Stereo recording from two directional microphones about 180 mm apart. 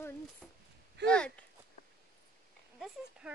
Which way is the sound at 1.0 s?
70° right (ahead or behind).